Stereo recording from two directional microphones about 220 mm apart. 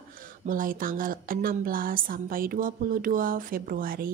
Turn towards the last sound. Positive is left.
turn(degrees=-40)  # may be behind; listen again after turning